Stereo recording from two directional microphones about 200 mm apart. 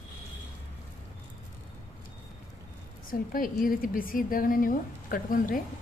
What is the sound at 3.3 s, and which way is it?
A woman's voice, 45° left (ahead or behind).